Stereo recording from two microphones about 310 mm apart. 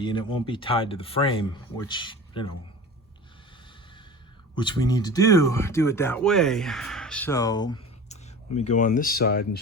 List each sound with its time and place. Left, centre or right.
0.0 s speech: centre
4.5 s speech: centre